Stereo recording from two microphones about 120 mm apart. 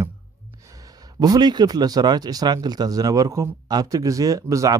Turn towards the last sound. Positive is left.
turn(degrees=-30)  # may be behind; listen again after turning